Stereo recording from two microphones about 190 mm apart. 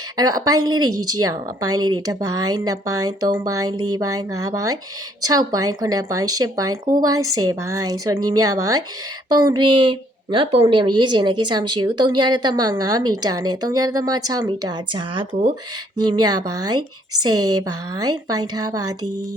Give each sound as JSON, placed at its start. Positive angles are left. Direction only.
{"t": 0.2, "sound": "a woman's voice", "side_deg": -20}